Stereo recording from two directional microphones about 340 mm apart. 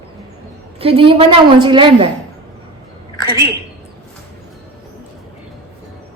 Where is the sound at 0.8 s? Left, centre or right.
Centre.